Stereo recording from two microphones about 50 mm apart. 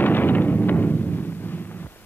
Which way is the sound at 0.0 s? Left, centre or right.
Left.